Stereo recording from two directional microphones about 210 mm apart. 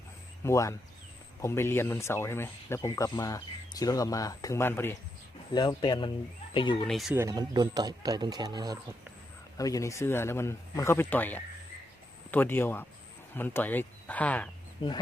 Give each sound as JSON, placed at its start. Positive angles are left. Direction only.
{"t": 0.4, "sound": "speech", "side_deg": 15}
{"t": 5.5, "sound": "speech", "side_deg": 20}
{"t": 6.8, "sound": "speech", "side_deg": 0}
{"t": 7.2, "sound": "speech", "side_deg": -20}
{"t": 9.6, "sound": "speech", "side_deg": 15}
{"t": 14.8, "sound": "speech", "side_deg": 25}